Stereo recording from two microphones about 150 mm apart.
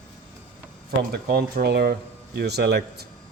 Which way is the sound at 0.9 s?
90° right.